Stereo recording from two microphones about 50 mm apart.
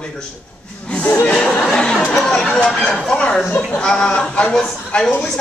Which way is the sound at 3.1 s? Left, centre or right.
Centre.